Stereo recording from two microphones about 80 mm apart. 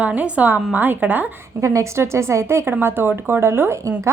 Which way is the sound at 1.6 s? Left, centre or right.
Right.